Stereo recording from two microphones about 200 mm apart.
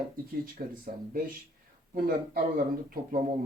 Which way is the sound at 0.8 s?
45° right (ahead or behind).